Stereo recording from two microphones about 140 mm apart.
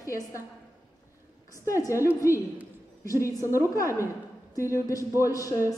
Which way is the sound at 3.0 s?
20° left (ahead or behind).